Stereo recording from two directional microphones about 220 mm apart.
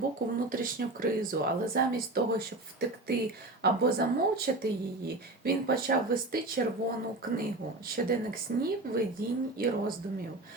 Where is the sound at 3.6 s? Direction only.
45° right (ahead or behind).